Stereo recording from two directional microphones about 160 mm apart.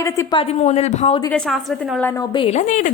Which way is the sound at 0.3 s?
40° left (ahead or behind).